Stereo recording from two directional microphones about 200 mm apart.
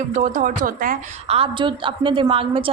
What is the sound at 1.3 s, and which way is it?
A woman's voice, 25° right (ahead or behind).